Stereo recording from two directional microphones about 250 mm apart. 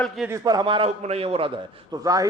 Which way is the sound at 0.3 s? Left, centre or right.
Centre.